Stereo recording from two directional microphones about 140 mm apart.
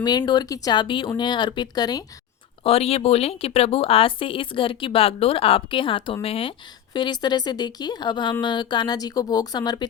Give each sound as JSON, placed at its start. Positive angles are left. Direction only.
{"t": 0.0, "sound": "speech", "side_deg": 30}
{"t": 2.6, "sound": "speech", "side_deg": 45}
{"t": 6.9, "sound": "speech", "side_deg": 30}